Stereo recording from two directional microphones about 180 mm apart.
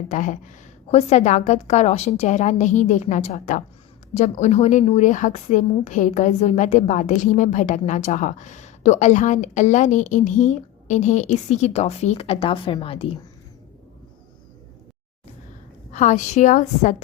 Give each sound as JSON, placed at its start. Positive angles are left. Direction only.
{"t": 0.1, "sound": "a woman's voice", "side_deg": 45}
{"t": 15.9, "sound": "a woman's voice", "side_deg": 45}